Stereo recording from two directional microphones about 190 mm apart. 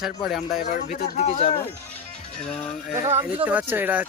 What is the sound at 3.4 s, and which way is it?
Speech, 10° right (ahead or behind).